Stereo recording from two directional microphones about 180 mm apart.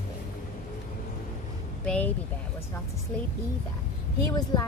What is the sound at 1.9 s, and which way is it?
Speech, 10° left (ahead or behind).